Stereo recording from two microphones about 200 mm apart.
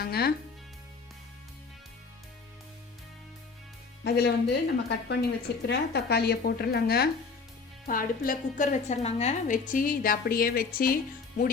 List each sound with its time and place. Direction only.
0.0 s a woman's voice: 50° left (ahead or behind)
4.0 s a woman's voice: 55° left (ahead or behind)